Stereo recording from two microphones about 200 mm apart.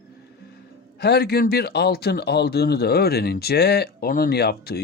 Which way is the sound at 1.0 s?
50° left (ahead or behind).